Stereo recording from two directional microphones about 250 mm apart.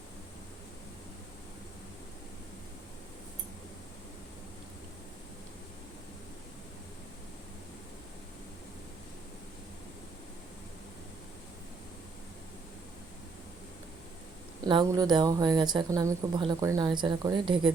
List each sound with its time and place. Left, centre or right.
14.6 s a woman's voice: centre